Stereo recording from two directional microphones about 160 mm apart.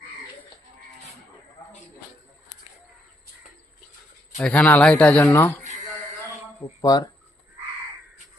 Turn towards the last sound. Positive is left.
turn(degrees=25)  # may be behind; listen again after turning